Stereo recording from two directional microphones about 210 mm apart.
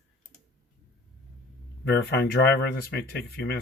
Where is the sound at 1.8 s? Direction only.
50° left (ahead or behind).